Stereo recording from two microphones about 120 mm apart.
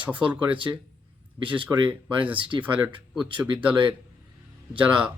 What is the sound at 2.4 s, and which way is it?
Speech, 45° right (ahead or behind).